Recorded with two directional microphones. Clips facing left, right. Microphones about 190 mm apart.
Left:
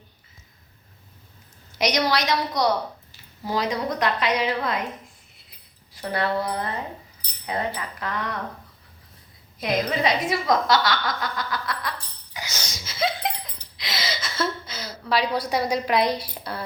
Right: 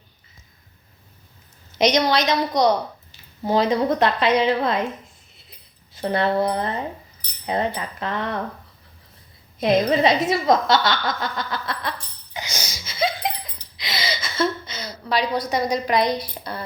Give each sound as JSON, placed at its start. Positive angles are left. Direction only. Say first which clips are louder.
{"t": 1.8, "sound": "a woman's voice", "louder": "right 4 dB", "side_deg": -25}
{"t": 5.9, "sound": "a woman's voice", "louder": "right 4 dB", "side_deg": -25}
{"t": 9.6, "sound": "speech", "louder": "right 6 dB", "side_deg": -25}
{"t": 12.7, "sound": "a sound", "louder": "right 2 dB", "side_deg": 0}
{"t": 13.7, "sound": "gasp", "louder": "right 2 dB", "side_deg": 0}
{"t": 15.4, "sound": "a woman's voice", "louder": "right 1 dB", "side_deg": 10}